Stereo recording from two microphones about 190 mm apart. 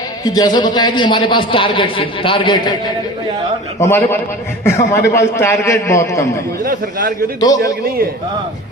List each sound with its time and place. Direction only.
0.3 s a man's voice: 20° left (ahead or behind)
3.8 s a man's voice: 15° left (ahead or behind)
7.3 s a man's voice: 20° left (ahead or behind)